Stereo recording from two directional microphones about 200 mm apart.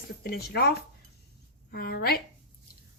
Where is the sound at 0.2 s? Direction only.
50° left (ahead or behind).